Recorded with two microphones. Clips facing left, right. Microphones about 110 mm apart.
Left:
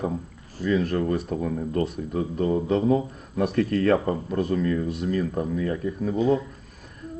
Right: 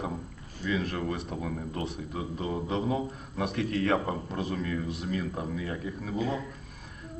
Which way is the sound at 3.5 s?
45° left (ahead or behind).